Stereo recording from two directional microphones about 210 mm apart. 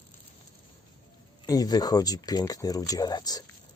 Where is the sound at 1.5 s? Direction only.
20° left (ahead or behind).